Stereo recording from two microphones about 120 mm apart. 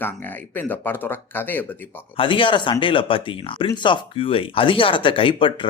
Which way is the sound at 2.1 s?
45° left (ahead or behind).